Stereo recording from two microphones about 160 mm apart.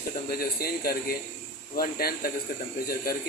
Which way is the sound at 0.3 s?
70° left (ahead or behind).